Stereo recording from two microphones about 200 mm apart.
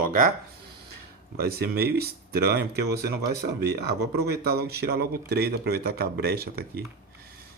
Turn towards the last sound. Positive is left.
turn(degrees=-50)  # may be behind; listen again after turning